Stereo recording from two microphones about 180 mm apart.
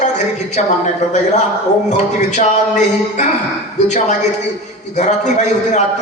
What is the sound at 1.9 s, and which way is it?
Music, 40° left (ahead or behind).